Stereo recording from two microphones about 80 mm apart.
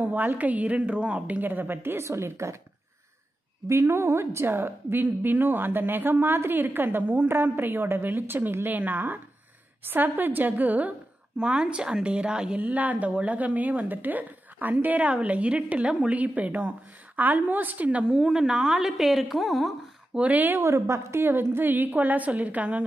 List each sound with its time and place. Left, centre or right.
0.0 s a woman's voice: right
3.6 s a woman's voice: right; by 19.7 s centre
20.2 s a woman's voice: centre
20.6 s a woman's voice: right; by 22.8 s centre